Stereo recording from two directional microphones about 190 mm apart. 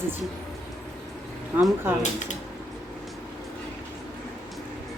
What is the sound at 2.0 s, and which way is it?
Speech, 40° left (ahead or behind).